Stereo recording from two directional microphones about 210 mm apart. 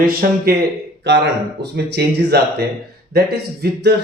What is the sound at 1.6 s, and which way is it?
Speech, 50° right (ahead or behind).